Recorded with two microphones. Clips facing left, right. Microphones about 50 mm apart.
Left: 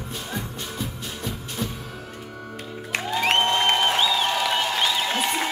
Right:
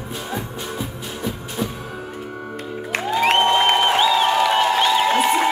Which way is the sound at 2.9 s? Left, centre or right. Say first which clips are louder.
Right 4 dB; centre.